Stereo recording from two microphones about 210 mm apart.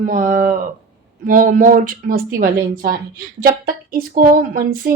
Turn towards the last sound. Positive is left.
turn(degrees=-40)  # may be behind; listen again after turning